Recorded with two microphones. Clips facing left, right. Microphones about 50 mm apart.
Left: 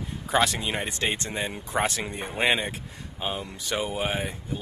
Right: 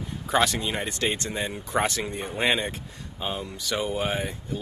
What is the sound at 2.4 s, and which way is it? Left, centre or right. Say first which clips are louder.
Speech: left 1 dB; centre.